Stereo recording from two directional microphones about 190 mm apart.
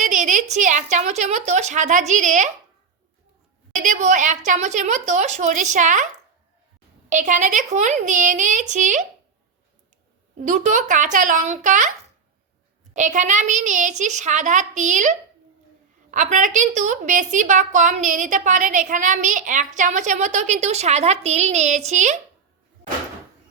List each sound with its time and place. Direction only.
0.0 s a woman's voice: 40° right (ahead or behind)
3.8 s a woman's voice: 40° right (ahead or behind)
7.1 s a woman's voice: 40° right (ahead or behind)
10.4 s a woman's voice: 40° right (ahead or behind)
12.9 s a woman's voice: 40° right (ahead or behind)
16.1 s a woman's voice: 40° right (ahead or behind)